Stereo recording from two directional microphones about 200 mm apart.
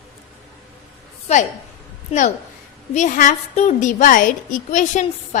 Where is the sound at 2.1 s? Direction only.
35° left (ahead or behind).